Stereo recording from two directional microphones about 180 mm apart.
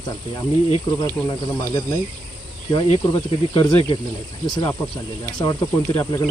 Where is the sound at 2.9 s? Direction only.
25° left (ahead or behind).